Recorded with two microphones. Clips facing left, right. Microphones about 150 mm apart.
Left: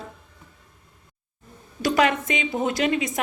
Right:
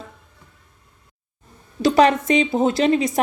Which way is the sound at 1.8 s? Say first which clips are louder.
Right 6 dB; 30° right (ahead or behind).